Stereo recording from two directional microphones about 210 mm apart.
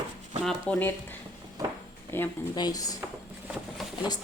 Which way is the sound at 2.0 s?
10° left (ahead or behind).